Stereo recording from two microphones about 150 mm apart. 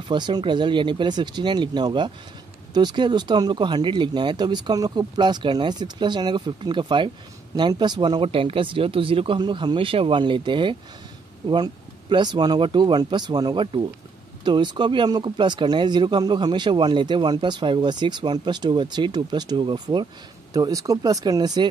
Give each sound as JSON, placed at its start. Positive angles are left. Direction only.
{"t": 0.1, "sound": "speech", "side_deg": -30}